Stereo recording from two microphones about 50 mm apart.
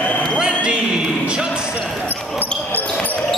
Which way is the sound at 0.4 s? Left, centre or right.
Centre.